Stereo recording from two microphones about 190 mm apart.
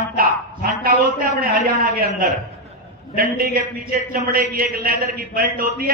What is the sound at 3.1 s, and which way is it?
A man's voice, 50° right (ahead or behind).